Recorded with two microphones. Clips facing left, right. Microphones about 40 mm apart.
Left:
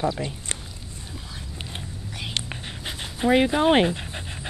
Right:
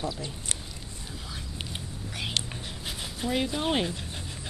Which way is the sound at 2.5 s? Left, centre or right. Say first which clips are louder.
Left 3 dB; left.